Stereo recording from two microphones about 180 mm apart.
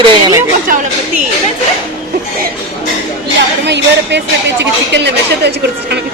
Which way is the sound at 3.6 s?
75° right (ahead or behind).